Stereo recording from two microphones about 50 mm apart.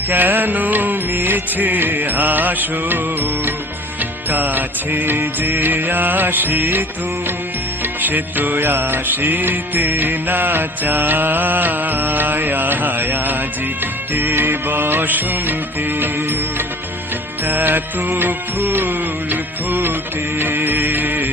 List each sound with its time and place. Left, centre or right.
0.1 s music: right
8.0 s music: right